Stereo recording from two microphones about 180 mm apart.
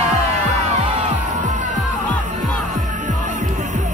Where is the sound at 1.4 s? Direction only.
40° right (ahead or behind).